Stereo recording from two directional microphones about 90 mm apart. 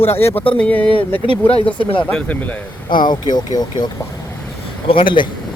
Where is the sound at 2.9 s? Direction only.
55° left (ahead or behind).